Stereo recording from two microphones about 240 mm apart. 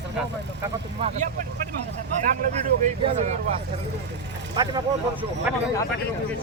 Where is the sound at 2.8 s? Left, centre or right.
Right.